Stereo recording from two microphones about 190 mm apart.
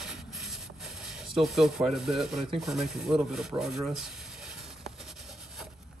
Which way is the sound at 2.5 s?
Centre (ahead or behind).